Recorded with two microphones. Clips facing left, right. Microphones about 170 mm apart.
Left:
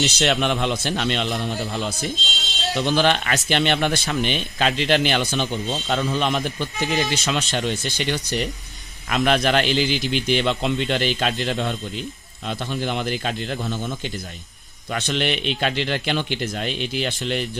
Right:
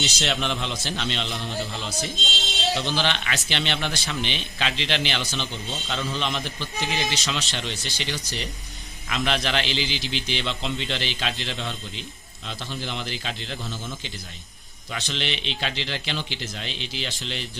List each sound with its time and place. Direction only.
0.0 s a man's voice: 65° left (ahead or behind)